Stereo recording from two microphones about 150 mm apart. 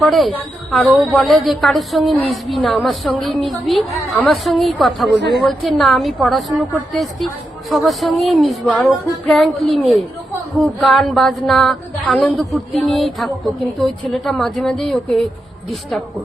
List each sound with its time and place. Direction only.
0.0 s a woman's voice: centre (ahead or behind)
4.1 s a woman's voice: 5° left (ahead or behind)